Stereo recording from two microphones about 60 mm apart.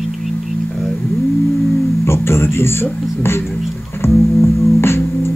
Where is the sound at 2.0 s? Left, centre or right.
Left.